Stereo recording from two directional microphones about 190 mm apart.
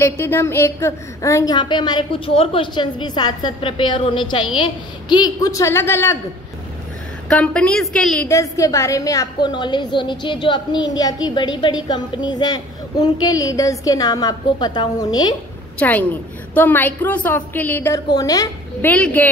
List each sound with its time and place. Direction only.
0.0 s a woman's voice: 10° left (ahead or behind)
7.2 s a woman's voice: 5° left (ahead or behind)
8.3 s a woman's voice: 15° left (ahead or behind)
15.8 s a woman's voice: 10° left (ahead or behind)